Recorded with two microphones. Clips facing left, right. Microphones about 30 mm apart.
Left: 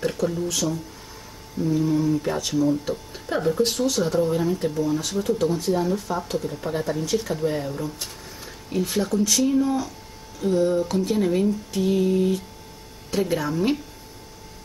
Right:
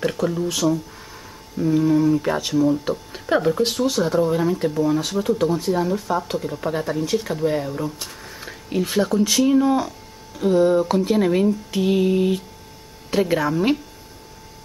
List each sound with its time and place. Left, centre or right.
0.2 s speech: right